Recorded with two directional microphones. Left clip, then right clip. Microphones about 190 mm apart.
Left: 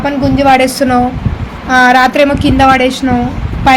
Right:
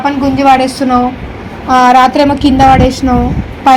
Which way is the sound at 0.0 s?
45° left (ahead or behind).